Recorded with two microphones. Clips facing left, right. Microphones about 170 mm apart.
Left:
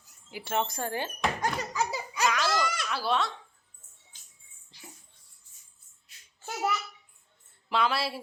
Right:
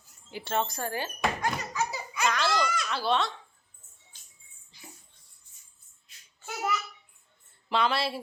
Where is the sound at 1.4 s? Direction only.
35° left (ahead or behind).